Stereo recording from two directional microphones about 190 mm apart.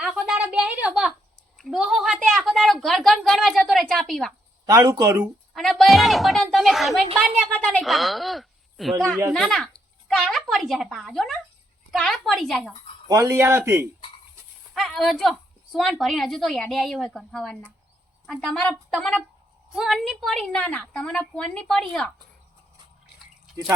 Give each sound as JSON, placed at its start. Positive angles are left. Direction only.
{"t": 0.0, "sound": "a sound", "side_deg": 0}
{"t": 1.5, "sound": "a woman's voice", "side_deg": 0}
{"t": 4.6, "sound": "speech", "side_deg": -20}
{"t": 5.2, "sound": "a woman's voice", "side_deg": 0}
{"t": 13.1, "sound": "speech", "side_deg": -15}
{"t": 14.7, "sound": "a woman's voice", "side_deg": 0}